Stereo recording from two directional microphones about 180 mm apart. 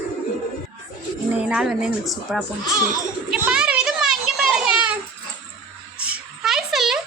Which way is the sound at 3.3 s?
5° right (ahead or behind).